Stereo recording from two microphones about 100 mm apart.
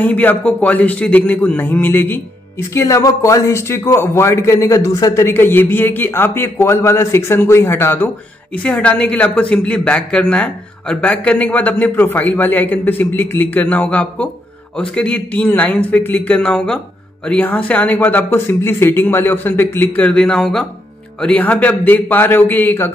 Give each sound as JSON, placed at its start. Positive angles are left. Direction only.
{"t": 0.0, "sound": "speech", "side_deg": 15}
{"t": 2.7, "sound": "a man's voice", "side_deg": 30}
{"t": 20.0, "sound": "a man's voice", "side_deg": 10}